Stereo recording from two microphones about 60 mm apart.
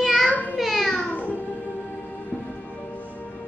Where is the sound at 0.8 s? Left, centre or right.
Centre.